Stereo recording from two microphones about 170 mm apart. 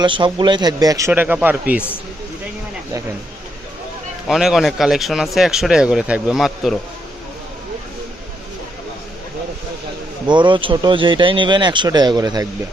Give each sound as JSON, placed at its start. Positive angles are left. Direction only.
{"t": 0.0, "sound": "speech", "side_deg": -30}
{"t": 4.3, "sound": "speech", "side_deg": 0}
{"t": 10.2, "sound": "speech", "side_deg": -25}